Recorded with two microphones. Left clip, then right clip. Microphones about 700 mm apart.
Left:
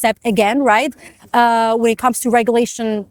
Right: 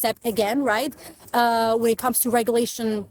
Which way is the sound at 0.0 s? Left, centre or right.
Left.